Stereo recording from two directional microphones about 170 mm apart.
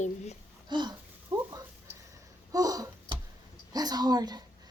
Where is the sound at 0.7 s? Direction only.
25° right (ahead or behind).